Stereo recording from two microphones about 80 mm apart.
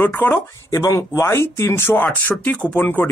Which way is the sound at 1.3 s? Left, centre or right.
Left.